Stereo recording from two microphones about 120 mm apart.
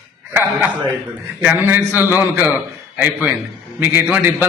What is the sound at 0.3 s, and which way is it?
A man's voice, 15° right (ahead or behind).